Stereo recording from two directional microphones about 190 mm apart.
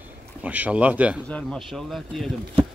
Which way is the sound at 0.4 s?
5° right (ahead or behind).